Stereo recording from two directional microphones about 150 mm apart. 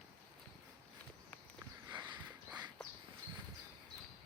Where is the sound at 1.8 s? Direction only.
30° right (ahead or behind).